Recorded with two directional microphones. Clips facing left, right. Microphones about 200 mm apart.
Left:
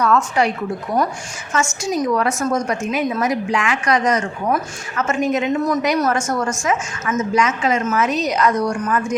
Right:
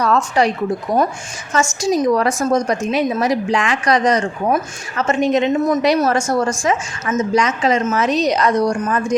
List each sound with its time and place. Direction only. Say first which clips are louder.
0.0 s a woman's voice: right 1 dB; 35° right (ahead or behind)
1.5 s a woman's voice: right 4 dB; 35° right (ahead or behind)